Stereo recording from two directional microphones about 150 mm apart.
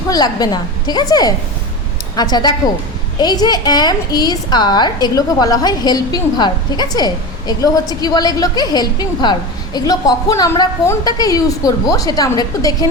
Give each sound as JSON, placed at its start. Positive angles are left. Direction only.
{"t": 0.1, "sound": "a woman's voice", "side_deg": 25}